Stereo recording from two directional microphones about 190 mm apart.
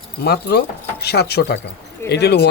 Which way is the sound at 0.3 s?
60° left (ahead or behind).